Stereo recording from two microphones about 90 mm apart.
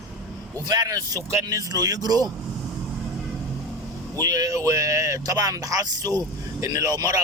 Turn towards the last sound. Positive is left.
turn(degrees=-45)  # may be behind; listen again after turning